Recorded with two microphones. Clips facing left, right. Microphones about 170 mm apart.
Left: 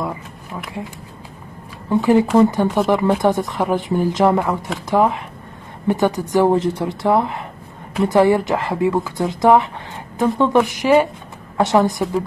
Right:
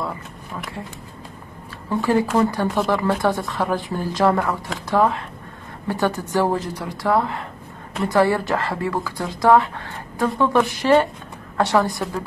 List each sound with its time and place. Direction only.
1.9 s speech: 20° left (ahead or behind)